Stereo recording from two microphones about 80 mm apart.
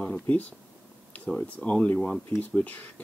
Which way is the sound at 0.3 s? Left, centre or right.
Centre.